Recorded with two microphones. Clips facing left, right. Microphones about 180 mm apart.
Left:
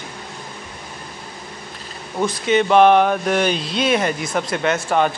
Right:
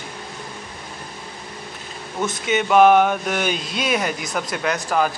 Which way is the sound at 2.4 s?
5° right (ahead or behind).